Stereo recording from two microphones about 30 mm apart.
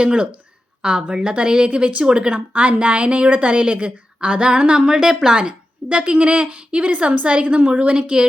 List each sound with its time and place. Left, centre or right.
0.0 s a woman's voice: right
1.7 s a woman's voice: right
2.5 s a woman's voice: right
5.5 s a woman's voice: right
7.1 s a woman's voice: right